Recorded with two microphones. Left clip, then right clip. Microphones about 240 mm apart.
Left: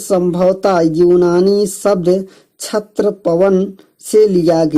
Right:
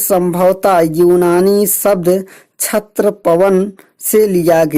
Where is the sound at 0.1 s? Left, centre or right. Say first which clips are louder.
Right 1 dB; right.